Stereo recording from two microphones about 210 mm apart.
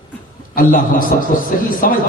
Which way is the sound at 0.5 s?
40° left (ahead or behind).